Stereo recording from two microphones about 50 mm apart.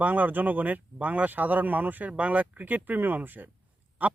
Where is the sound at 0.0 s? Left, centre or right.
Right.